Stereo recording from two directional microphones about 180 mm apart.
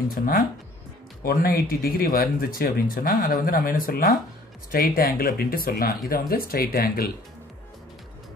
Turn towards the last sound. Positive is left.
turn(degrees=55)  # may be behind; listen again after turning